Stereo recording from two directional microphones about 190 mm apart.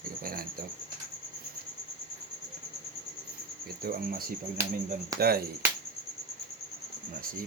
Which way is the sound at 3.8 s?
50° right (ahead or behind).